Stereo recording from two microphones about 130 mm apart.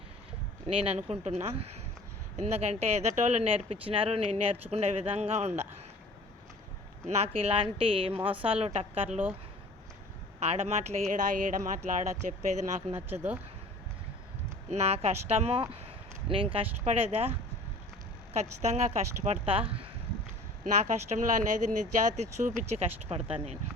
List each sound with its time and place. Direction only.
0.7 s speech: 50° right (ahead or behind)
3.4 s speech: 45° right (ahead or behind)
7.1 s speech: 50° right (ahead or behind)
10.4 s speech: 50° right (ahead or behind)
13.1 s speech: 15° right (ahead or behind)
14.7 s speech: 55° right (ahead or behind)
18.3 s speech: 55° right (ahead or behind)
20.8 s speech: 70° right (ahead or behind); by 23.6 s 50° right (ahead or behind)